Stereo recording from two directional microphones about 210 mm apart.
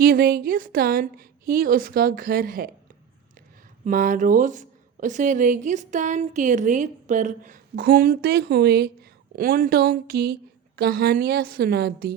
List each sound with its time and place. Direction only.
0.0 s a woman's voice: 45° right (ahead or behind)
3.8 s a woman's voice: 40° right (ahead or behind)